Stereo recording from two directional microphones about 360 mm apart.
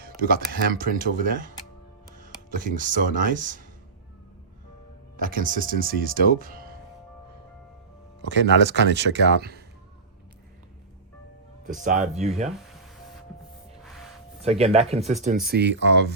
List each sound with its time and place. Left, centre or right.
0.0 s speech: right
5.1 s speech: right
8.2 s speech: right
11.6 s speech: right
14.4 s speech: centre